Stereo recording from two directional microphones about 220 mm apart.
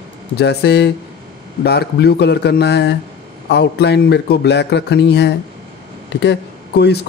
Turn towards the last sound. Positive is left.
turn(degrees=50)  # may be behind; listen again after turning